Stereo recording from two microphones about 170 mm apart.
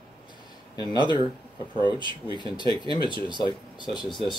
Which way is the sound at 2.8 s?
25° left (ahead or behind).